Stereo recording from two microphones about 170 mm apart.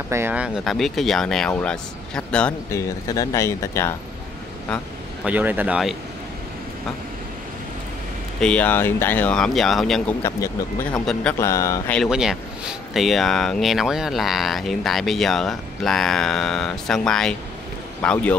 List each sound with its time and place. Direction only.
0.1 s speech: 10° right (ahead or behind); by 2.5 s 5° left (ahead or behind)
2.7 s speech: 15° left (ahead or behind)
5.2 s speech: 10° right (ahead or behind)
8.4 s speech: 5° left (ahead or behind)
10.2 s speech: 15° left (ahead or behind)
10.9 s speech: 5° left (ahead or behind)
11.3 s speech: 15° left (ahead or behind)
11.9 s speech: centre (ahead or behind)